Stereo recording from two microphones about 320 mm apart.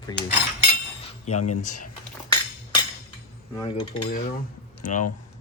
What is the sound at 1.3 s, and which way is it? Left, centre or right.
Speech, left.